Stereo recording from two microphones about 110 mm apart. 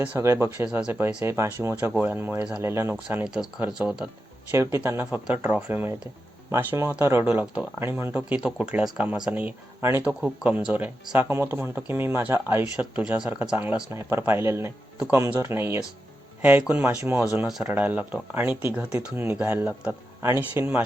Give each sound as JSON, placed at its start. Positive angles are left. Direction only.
{"t": 0.0, "sound": "speech", "side_deg": -15}
{"t": 0.6, "sound": "speech", "side_deg": -10}
{"t": 1.0, "sound": "speech", "side_deg": -25}
{"t": 3.3, "sound": "speech", "side_deg": -5}
{"t": 4.5, "sound": "speech", "side_deg": -25}
{"t": 12.7, "sound": "speech", "side_deg": -10}